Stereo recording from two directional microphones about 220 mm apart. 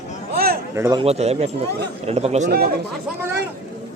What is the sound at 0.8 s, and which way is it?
Speech, 15° right (ahead or behind).